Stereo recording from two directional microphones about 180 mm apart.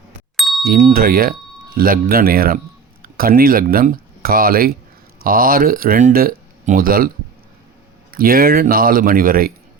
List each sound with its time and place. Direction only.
0.3 s ding: centre (ahead or behind)
0.6 s speech: 50° right (ahead or behind)
8.1 s speech: 55° right (ahead or behind)